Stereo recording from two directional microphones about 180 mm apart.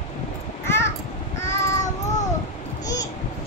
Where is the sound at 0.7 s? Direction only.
15° left (ahead or behind).